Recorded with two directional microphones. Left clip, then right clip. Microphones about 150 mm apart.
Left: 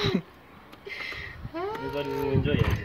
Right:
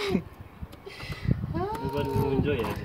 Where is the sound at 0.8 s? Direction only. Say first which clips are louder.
Left 5 dB; 45° right (ahead or behind).